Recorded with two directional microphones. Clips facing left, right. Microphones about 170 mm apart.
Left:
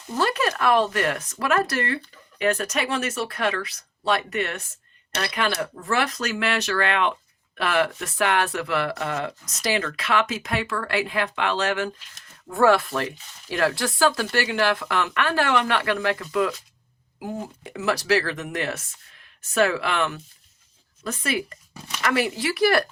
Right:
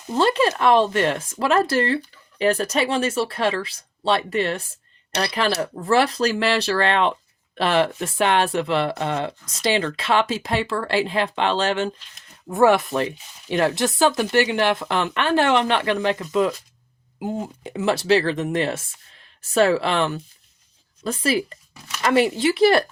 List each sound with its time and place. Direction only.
0.1 s speech: 25° right (ahead or behind)